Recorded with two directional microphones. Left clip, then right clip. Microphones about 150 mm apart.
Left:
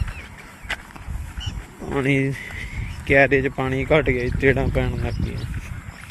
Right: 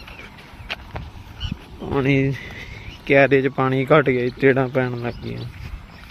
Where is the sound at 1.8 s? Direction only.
10° right (ahead or behind); by 4.9 s 30° right (ahead or behind).